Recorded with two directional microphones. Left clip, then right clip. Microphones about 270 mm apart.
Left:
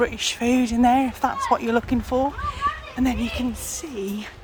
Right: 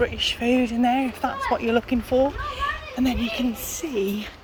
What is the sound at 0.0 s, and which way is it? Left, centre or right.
A child's voice, centre.